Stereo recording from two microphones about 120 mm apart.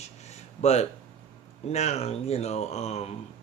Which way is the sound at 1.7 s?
65° left (ahead or behind).